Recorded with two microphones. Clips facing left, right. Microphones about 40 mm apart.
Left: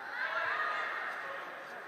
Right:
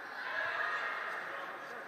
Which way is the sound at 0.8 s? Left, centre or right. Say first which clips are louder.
Left 1 dB; centre.